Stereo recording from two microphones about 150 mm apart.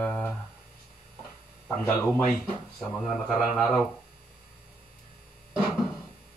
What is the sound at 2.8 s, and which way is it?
Speech, 5° left (ahead or behind).